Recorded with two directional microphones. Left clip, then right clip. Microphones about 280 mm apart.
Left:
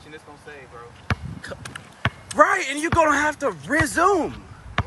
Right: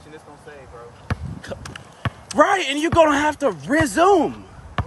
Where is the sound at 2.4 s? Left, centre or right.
Right.